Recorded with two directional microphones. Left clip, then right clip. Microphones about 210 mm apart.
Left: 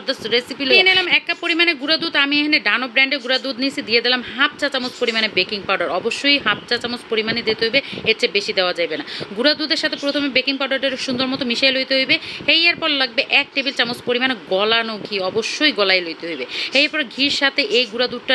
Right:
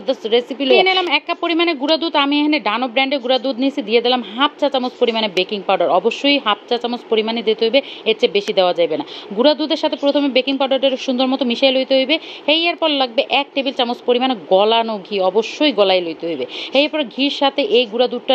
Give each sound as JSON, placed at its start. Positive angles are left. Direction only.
{"t": 0.0, "sound": "speech", "side_deg": 10}